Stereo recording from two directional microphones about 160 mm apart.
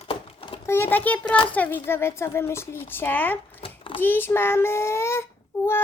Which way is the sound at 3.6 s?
35° left (ahead or behind).